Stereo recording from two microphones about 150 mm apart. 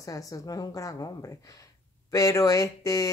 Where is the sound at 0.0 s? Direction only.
20° left (ahead or behind).